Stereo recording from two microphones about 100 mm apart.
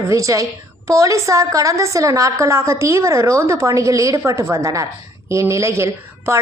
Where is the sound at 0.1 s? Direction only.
30° right (ahead or behind).